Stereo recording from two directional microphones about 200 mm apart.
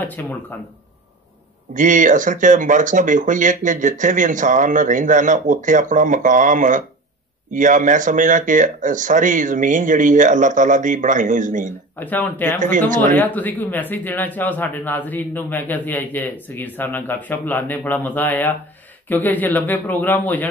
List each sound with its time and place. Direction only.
0.0 s a man's voice: 10° left (ahead or behind)
1.7 s speech: 40° right (ahead or behind)
12.0 s a man's voice: 10° left (ahead or behind)